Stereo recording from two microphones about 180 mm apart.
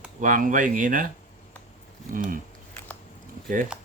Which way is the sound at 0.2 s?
50° right (ahead or behind).